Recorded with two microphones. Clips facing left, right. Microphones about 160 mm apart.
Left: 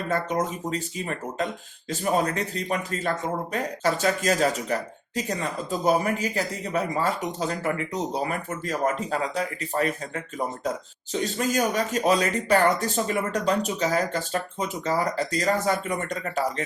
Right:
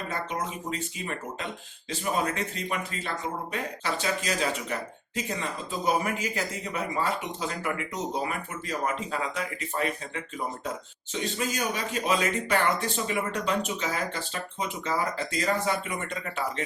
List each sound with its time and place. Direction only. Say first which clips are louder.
0.1 s speech: left 9 dB; 45° left (ahead or behind)